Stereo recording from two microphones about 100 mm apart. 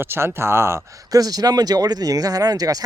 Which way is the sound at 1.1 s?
40° right (ahead or behind).